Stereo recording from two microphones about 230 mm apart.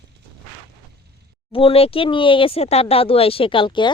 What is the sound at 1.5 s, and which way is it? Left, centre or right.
Speech, left.